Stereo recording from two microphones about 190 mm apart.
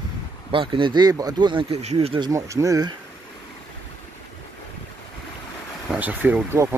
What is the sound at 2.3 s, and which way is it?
Speech, 15° right (ahead or behind).